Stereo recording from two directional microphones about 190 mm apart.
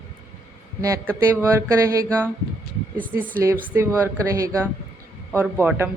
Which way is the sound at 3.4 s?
10° right (ahead or behind).